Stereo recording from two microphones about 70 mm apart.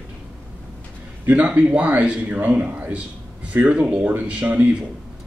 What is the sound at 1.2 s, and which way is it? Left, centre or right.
A man's voice, right.